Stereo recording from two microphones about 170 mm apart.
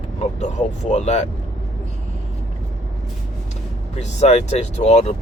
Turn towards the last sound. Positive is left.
turn(degrees=40)  # may be behind; listen again after turning